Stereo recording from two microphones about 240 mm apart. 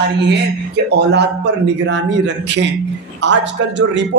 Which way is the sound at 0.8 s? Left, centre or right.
Right.